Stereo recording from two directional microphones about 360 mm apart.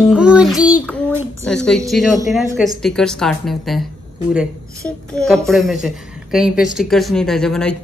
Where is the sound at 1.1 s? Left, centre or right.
Centre.